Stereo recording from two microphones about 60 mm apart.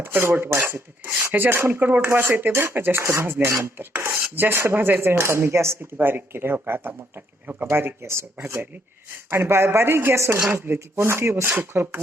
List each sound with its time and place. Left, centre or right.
0.0 s speech: right
3.0 s cutlery: right
6.1 s speech: right
7.4 s cutlery: right